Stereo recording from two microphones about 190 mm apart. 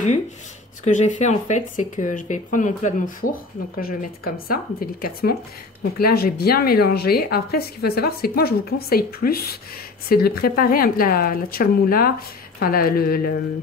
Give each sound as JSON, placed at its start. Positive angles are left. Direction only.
{"t": 0.8, "sound": "speech", "side_deg": 40}